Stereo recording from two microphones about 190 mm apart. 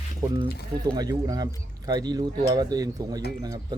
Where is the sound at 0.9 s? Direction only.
20° right (ahead or behind).